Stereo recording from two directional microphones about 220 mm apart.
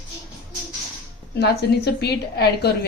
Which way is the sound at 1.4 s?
50° left (ahead or behind).